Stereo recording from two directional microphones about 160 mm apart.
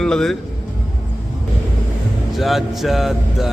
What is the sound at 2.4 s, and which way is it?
Speech, centre (ahead or behind).